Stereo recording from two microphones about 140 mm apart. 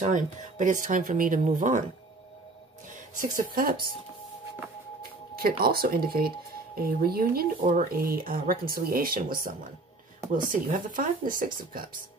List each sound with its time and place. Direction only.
0.0 s speech: 60° right (ahead or behind)
2.9 s a woman's voice: 70° right (ahead or behind)
5.6 s speech: 90° right